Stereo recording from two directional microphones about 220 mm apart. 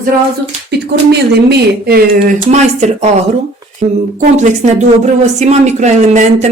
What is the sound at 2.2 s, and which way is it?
A woman's voice, 30° right (ahead or behind).